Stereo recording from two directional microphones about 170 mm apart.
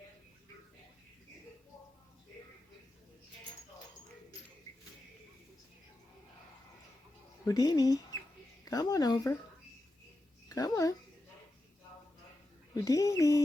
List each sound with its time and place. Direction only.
7.4 s speech: 20° left (ahead or behind)
10.5 s speech: 20° left (ahead or behind)
12.7 s speech: 20° left (ahead or behind)